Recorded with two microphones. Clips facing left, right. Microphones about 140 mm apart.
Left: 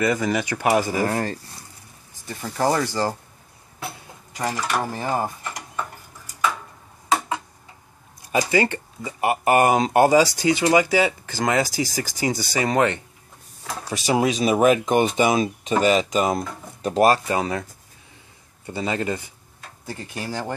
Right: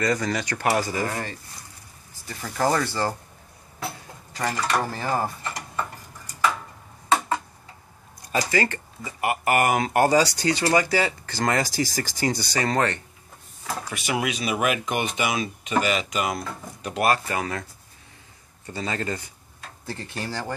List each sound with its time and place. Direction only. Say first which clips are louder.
0.0 s speech: left 3 dB; 10° left (ahead or behind)
1.0 s speech: left 6 dB; 40° left (ahead or behind)
2.5 s speech: left 2 dB; 15° left (ahead or behind)
3.8 s a sound: right 1 dB; 15° left (ahead or behind)
4.6 s dishes: right 1 dB; 5° left (ahead or behind)
8.3 s speech: left 4 dB; 15° left (ahead or behind)
13.8 s speech: left 7 dB; 30° left (ahead or behind)
17.3 s speech: left 5 dB; 20° left (ahead or behind)
18.7 s speech: left 4 dB; 15° left (ahead or behind)